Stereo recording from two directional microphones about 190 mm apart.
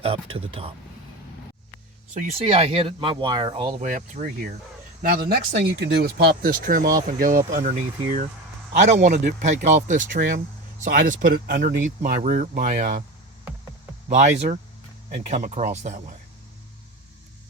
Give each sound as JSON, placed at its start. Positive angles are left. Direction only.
{"t": 0.0, "sound": "speech", "side_deg": -30}
{"t": 2.1, "sound": "speech", "side_deg": -35}
{"t": 3.8, "sound": "speech", "side_deg": -45}
{"t": 14.1, "sound": "speech", "side_deg": -40}